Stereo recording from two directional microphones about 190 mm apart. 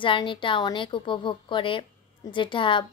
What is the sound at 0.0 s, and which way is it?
A woman's voice, 25° left (ahead or behind).